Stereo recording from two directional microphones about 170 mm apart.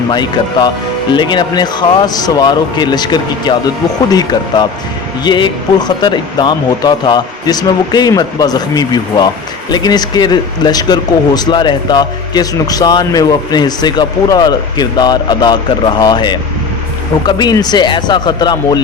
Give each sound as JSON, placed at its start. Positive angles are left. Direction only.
{"t": 0.1, "sound": "speech", "side_deg": 25}